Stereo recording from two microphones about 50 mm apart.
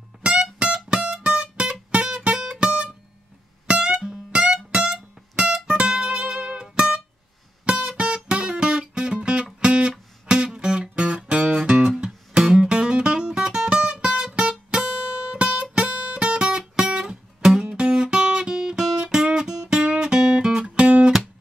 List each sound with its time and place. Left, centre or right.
0.2 s music: centre
15.3 s guitar: right